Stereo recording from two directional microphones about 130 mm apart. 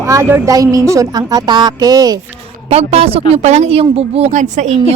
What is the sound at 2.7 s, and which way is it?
A woman's voice, 55° right (ahead or behind).